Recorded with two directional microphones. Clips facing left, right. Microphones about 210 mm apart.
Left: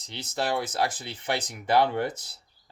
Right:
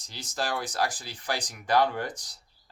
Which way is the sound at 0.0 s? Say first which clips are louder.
Left 3 dB; 20° left (ahead or behind).